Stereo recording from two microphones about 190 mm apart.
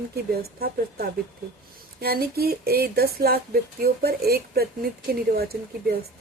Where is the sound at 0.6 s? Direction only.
55° right (ahead or behind).